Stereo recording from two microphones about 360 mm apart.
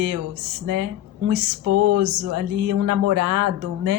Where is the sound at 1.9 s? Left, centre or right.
Right.